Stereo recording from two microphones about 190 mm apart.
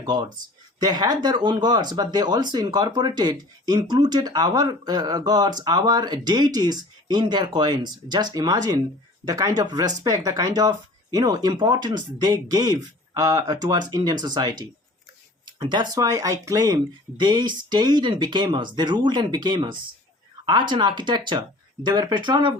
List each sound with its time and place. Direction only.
0.0 s speech: 20° right (ahead or behind)